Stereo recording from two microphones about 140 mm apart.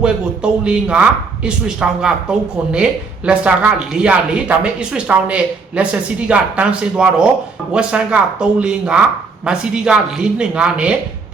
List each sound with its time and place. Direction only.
0.0 s speech: 5° right (ahead or behind)